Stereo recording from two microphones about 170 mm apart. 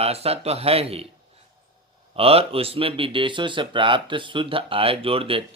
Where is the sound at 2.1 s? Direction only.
35° right (ahead or behind).